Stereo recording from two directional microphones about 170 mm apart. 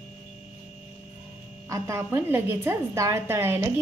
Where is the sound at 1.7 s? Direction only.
15° right (ahead or behind).